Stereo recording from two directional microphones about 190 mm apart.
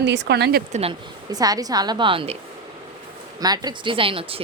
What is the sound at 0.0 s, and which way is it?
Speech, 65° right (ahead or behind).